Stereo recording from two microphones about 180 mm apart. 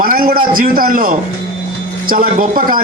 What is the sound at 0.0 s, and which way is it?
A man's voice, 55° right (ahead or behind).